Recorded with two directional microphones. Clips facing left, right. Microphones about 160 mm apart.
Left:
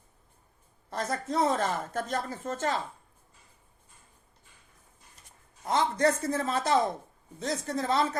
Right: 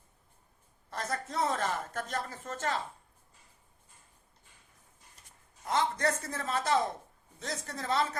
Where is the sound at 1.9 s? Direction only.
30° left (ahead or behind).